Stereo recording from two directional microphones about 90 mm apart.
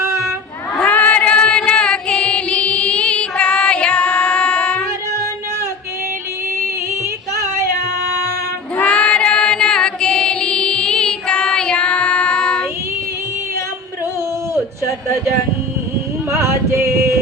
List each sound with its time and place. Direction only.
0.8 s female singing: 15° left (ahead or behind)
8.7 s chant: 15° left (ahead or behind)
16.4 s music: 30° right (ahead or behind)